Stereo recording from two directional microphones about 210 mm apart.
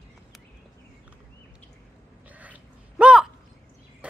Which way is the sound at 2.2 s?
5° right (ahead or behind).